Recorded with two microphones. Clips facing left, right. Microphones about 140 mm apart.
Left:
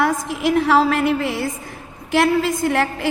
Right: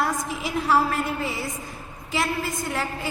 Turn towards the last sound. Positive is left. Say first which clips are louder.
# left 9 dB
turn(degrees=75)  # may be behind; listen again after turning